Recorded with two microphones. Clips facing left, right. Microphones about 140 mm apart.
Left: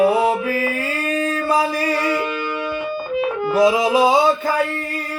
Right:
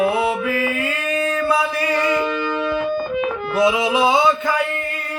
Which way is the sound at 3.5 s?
40° left (ahead or behind).